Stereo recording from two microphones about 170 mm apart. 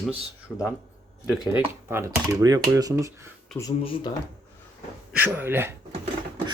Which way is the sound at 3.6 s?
25° left (ahead or behind).